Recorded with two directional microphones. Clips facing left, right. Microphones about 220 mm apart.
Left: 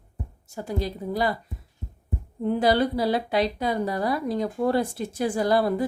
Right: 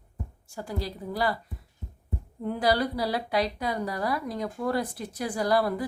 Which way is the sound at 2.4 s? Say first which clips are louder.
Left 4 dB; 25° left (ahead or behind).